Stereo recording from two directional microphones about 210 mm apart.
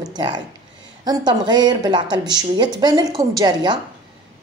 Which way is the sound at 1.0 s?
20° right (ahead or behind).